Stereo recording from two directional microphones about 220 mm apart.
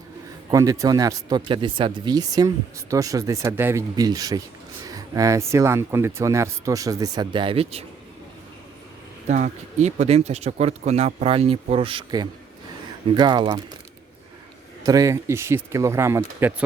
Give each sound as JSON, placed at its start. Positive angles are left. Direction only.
{"t": 0.5, "sound": "speech", "side_deg": -15}
{"t": 9.2, "sound": "speech", "side_deg": -35}
{"t": 14.8, "sound": "speech", "side_deg": -15}